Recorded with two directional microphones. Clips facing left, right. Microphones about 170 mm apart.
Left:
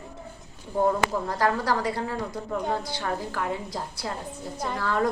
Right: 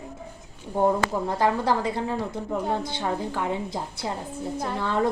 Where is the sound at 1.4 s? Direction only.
20° right (ahead or behind).